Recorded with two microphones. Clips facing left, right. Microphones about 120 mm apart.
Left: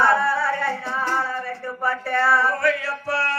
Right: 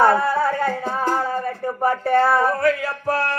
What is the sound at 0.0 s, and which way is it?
Music, 45° right (ahead or behind).